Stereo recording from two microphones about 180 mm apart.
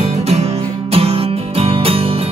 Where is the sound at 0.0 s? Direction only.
35° right (ahead or behind).